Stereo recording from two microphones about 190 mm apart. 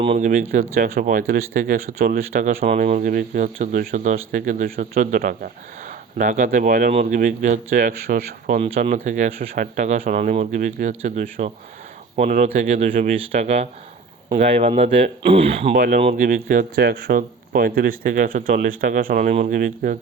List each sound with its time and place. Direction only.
0.0 s speech: 30° right (ahead or behind)
0.5 s speech: 45° right (ahead or behind)
2.6 s speech: 40° right (ahead or behind)
15.7 s speech: 40° right (ahead or behind)